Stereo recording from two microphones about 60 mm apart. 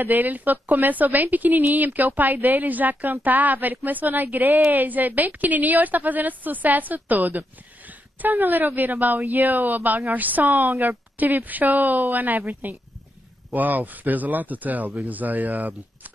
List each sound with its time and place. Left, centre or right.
0.0 s a woman's voice: right